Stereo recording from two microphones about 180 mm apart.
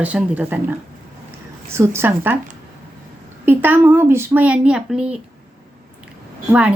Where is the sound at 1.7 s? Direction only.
15° right (ahead or behind).